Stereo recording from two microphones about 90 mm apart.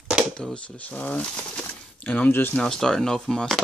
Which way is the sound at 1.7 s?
15° left (ahead or behind).